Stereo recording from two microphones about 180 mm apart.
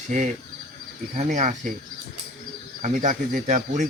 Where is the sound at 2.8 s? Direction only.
40° right (ahead or behind).